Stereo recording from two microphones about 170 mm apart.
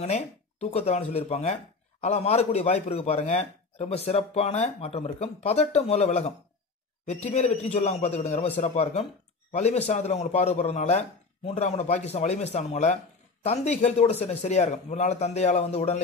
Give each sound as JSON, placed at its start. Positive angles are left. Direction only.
{"t": 0.0, "sound": "speech", "side_deg": 40}